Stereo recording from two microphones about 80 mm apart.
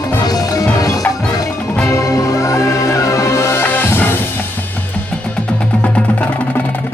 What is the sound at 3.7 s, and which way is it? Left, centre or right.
Music, left.